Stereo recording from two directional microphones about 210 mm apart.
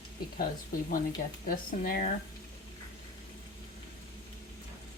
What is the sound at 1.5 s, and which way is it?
Speech, 45° left (ahead or behind).